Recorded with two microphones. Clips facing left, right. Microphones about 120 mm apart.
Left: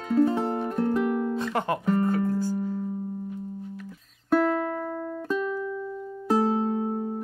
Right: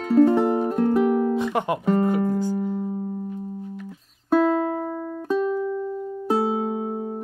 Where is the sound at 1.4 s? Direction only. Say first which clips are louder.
Right 3 dB; 15° right (ahead or behind).